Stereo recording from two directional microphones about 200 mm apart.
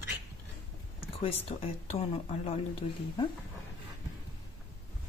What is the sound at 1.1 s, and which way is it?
A woman's voice, 30° left (ahead or behind).